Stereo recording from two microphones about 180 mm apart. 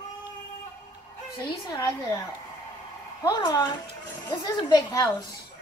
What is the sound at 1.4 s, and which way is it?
Speech, 20° left (ahead or behind).